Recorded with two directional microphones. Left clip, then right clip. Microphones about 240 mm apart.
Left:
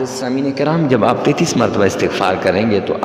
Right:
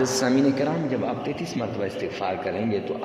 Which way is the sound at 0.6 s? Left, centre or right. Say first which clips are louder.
Left 12 dB; left.